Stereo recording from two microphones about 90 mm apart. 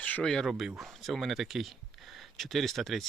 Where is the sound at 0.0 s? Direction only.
15° left (ahead or behind).